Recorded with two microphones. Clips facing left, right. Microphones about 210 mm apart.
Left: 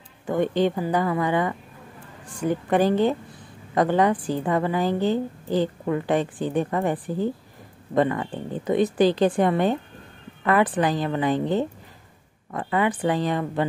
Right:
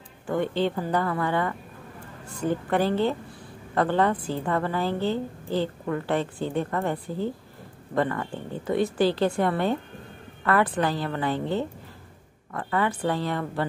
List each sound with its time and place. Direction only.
0.3 s a woman's voice: 15° left (ahead or behind)